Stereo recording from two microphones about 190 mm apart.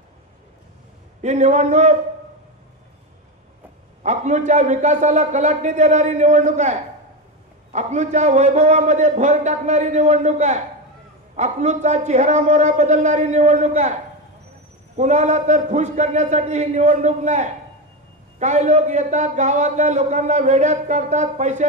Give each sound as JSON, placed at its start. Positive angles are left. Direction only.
{"t": 1.2, "sound": "a man's voice", "side_deg": -40}
{"t": 4.0, "sound": "a man's voice", "side_deg": -35}
{"t": 15.0, "sound": "a man's voice", "side_deg": -40}